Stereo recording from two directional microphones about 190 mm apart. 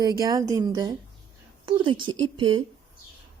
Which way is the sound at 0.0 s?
20° right (ahead or behind).